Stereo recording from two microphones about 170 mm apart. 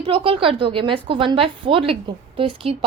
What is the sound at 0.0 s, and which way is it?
A woman's voice, 30° right (ahead or behind).